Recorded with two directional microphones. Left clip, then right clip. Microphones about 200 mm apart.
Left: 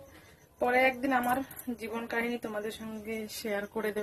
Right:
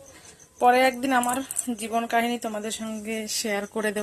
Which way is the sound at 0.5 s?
20° right (ahead or behind).